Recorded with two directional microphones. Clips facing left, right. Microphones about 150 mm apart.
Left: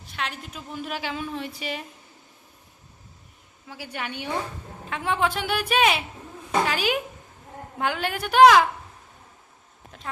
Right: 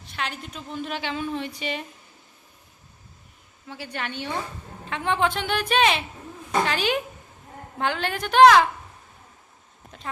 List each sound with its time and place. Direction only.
0.1 s a woman's voice: centre (ahead or behind)
3.7 s a woman's voice: 10° left (ahead or behind)